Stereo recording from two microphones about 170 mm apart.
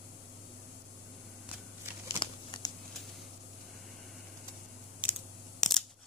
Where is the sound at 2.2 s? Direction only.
25° left (ahead or behind).